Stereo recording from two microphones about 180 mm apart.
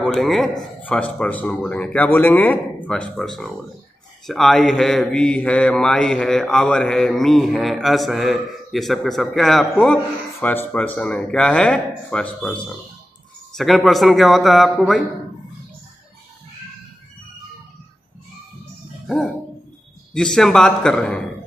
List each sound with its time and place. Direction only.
0.0 s speech: centre (ahead or behind)
19.0 s dog: centre (ahead or behind)
20.2 s speech: 5° left (ahead or behind)